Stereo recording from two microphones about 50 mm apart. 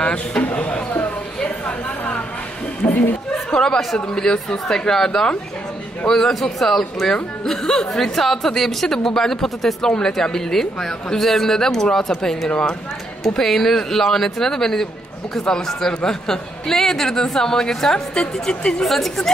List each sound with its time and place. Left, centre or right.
0.0 s speech: left
2.8 s speech: left
3.4 s a woman's voice: centre
12.4 s speech: left
13.2 s a woman's voice: centre; by 18.9 s left
18.9 s a woman's voice: centre